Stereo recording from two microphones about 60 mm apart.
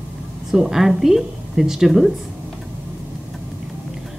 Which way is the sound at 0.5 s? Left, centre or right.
Centre.